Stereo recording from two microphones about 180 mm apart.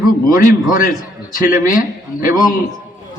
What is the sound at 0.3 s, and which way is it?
A man's voice, 50° left (ahead or behind).